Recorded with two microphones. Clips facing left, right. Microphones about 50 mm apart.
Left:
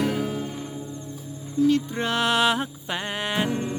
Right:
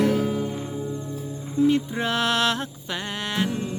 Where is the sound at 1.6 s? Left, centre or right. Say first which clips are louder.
Even; right.